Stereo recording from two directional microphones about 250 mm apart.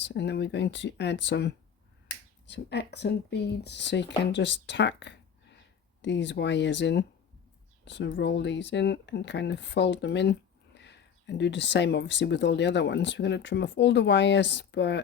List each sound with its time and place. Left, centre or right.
0.1 s speech: left